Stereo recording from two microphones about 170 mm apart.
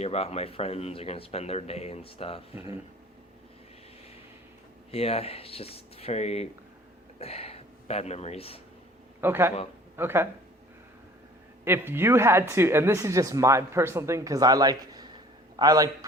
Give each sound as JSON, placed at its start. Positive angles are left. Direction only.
{"t": 0.0, "sound": "speech", "side_deg": 35}
{"t": 4.9, "sound": "speech", "side_deg": 35}
{"t": 9.2, "sound": "speech", "side_deg": -15}
{"t": 11.6, "sound": "speech", "side_deg": -15}